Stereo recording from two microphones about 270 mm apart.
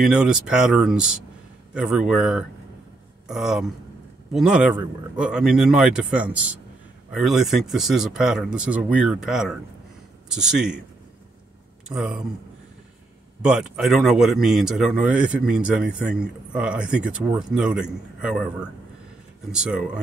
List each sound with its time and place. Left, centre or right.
0.0 s a man's voice: centre
11.9 s speech: centre
13.4 s speech: centre